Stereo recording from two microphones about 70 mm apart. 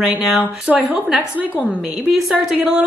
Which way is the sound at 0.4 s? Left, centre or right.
Centre.